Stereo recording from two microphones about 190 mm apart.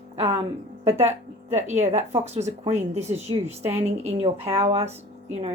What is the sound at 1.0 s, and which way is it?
Speech, 35° right (ahead or behind).